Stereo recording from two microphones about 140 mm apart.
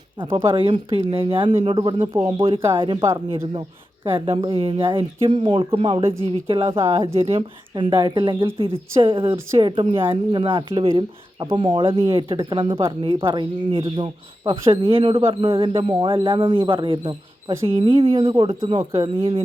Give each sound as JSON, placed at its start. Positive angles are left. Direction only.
{"t": 0.2, "sound": "speech", "side_deg": -40}
{"t": 4.3, "sound": "speech", "side_deg": -40}
{"t": 6.7, "sound": "speech", "side_deg": -20}
{"t": 7.0, "sound": "speech", "side_deg": -45}